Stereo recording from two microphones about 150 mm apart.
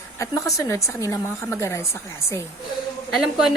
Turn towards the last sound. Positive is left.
turn(degrees=0)  # may be behind; listen again after turning